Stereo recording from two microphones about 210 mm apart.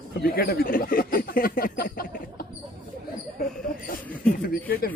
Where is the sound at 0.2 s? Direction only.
45° left (ahead or behind).